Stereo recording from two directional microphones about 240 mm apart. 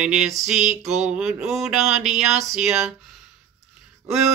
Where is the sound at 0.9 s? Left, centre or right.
Centre.